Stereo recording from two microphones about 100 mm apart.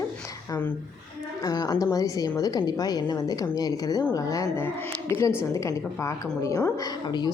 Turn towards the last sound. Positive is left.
turn(degrees=45)  # may be behind; listen again after turning